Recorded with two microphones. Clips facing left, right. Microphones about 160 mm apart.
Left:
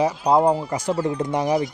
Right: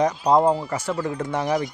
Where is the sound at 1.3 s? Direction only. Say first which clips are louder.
Left 2 dB; 15° left (ahead or behind).